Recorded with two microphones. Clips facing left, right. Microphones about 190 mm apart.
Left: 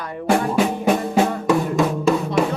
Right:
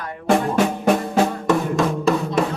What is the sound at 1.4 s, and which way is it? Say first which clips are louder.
Drum: left 1 dB; 10° left (ahead or behind).